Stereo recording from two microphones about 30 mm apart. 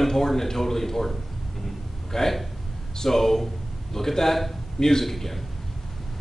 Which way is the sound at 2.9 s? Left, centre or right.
Centre.